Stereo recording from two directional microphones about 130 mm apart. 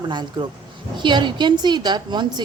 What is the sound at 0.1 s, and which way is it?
A woman's voice, 35° right (ahead or behind).